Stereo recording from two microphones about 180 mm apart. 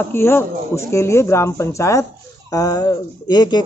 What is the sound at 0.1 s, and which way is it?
Speech, 15° left (ahead or behind).